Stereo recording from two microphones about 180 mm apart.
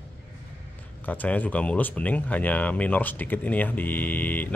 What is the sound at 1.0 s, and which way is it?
Speech, 10° left (ahead or behind).